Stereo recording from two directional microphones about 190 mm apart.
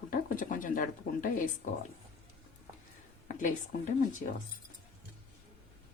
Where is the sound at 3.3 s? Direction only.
45° left (ahead or behind).